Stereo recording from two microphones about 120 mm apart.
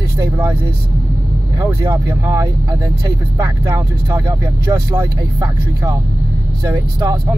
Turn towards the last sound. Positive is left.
turn(degrees=-25)  # may be behind; listen again after turning